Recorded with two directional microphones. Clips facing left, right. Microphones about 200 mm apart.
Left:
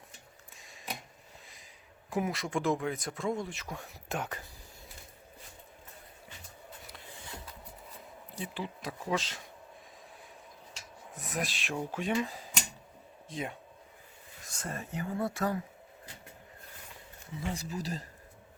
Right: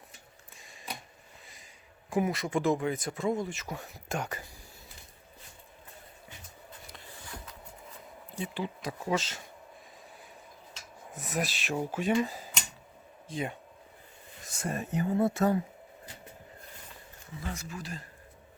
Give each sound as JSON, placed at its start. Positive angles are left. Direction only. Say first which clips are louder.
{"t": 0.5, "sound": "a sound", "louder": "even", "side_deg": 0}
{"t": 1.5, "sound": "speech", "louder": "right 1 dB", "side_deg": 0}
{"t": 8.4, "sound": "speech", "louder": "right 4 dB", "side_deg": 0}
{"t": 11.1, "sound": "speech", "louder": "right 3 dB", "side_deg": 0}
{"t": 17.4, "sound": "speech", "louder": "left 3 dB", "side_deg": 35}